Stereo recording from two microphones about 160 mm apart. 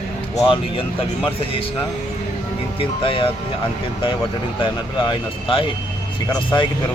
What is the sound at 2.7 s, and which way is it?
Speech, 35° left (ahead or behind).